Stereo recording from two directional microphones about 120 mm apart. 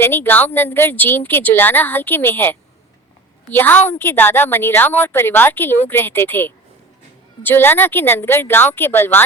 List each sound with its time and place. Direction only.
0.0 s a woman's voice: 20° left (ahead or behind)